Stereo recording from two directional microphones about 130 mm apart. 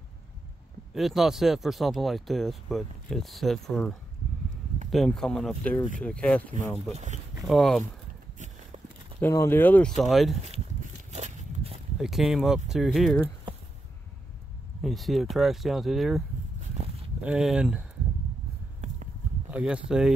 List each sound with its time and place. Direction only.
0.9 s speech: centre (ahead or behind)
4.9 s speech: 5° left (ahead or behind)
6.9 s speech: 60° right (ahead or behind)
7.4 s speech: centre (ahead or behind)
9.2 s speech: 20° left (ahead or behind); by 10.3 s centre (ahead or behind)
10.8 s a sound: 65° right (ahead or behind)
12.0 s speech: centre (ahead or behind)
14.8 s speech: centre (ahead or behind)
19.5 s speech: 10° right (ahead or behind)